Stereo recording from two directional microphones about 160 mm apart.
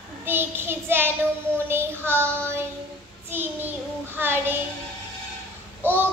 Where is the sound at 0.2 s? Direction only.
15° right (ahead or behind).